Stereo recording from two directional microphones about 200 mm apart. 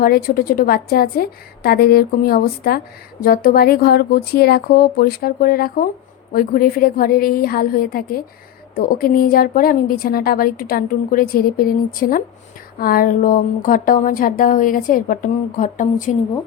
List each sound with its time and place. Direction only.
0.0 s a woman's voice: 50° left (ahead or behind)